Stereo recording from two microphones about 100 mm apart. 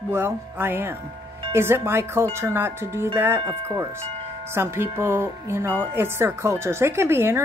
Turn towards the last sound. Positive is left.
turn(degrees=-25)  # may be behind; listen again after turning